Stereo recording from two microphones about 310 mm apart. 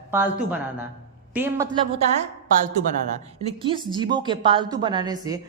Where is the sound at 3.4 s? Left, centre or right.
Centre.